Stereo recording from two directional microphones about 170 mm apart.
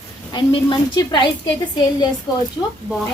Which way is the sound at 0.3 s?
25° left (ahead or behind).